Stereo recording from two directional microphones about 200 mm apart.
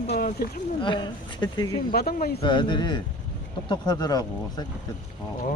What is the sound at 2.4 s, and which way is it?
Speech, 25° left (ahead or behind).